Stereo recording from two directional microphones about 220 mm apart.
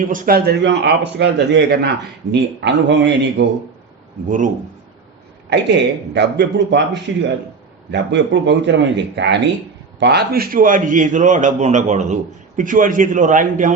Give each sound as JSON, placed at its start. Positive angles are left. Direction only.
{"t": 0.0, "sound": "speech", "side_deg": -35}
{"t": 4.3, "sound": "a man's voice", "side_deg": -35}
{"t": 5.5, "sound": "a man's voice", "side_deg": -50}